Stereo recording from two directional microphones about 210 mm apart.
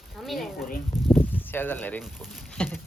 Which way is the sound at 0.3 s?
Centre (ahead or behind).